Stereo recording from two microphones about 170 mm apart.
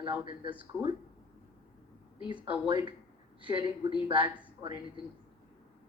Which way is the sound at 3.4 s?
30° right (ahead or behind).